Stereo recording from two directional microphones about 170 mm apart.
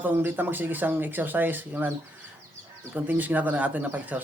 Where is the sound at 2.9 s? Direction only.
10° right (ahead or behind).